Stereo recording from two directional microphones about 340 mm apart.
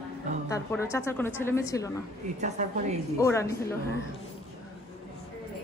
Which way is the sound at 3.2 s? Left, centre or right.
Centre.